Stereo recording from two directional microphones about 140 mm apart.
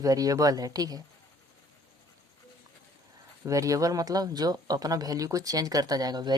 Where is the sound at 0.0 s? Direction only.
25° right (ahead or behind).